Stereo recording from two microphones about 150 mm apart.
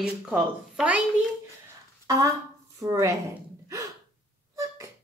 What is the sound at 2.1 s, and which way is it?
A woman's voice, 20° right (ahead or behind).